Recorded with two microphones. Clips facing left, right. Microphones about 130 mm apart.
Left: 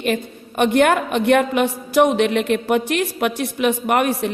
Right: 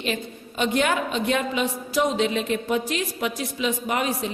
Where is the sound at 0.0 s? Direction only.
55° left (ahead or behind).